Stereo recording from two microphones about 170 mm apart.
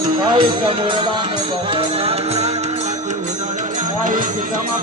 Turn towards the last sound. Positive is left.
turn(degrees=-50)  # may be behind; listen again after turning